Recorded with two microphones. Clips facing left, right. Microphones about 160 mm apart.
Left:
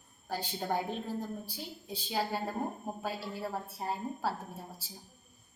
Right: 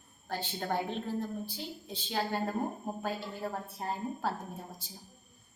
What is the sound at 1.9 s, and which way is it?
A woman's voice, 10° left (ahead or behind).